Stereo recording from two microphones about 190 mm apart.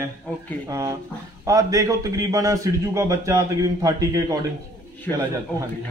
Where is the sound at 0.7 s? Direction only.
15° right (ahead or behind).